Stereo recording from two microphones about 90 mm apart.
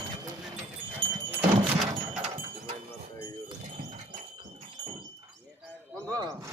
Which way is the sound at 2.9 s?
30° left (ahead or behind).